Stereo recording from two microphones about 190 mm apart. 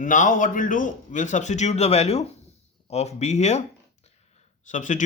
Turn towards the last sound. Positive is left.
turn(degrees=40)  # may be behind; listen again after turning